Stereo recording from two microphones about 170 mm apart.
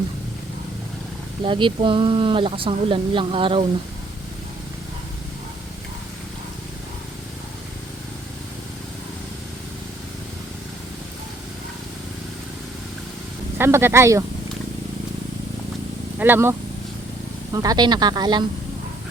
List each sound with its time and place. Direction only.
1.5 s speech: 30° right (ahead or behind)
13.6 s speech: 15° right (ahead or behind)
16.1 s speech: 10° right (ahead or behind)